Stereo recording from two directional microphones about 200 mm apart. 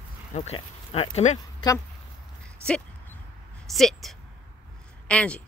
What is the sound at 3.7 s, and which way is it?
Speech, centre (ahead or behind).